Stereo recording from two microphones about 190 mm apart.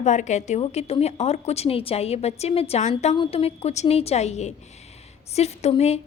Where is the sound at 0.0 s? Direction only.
40° left (ahead or behind).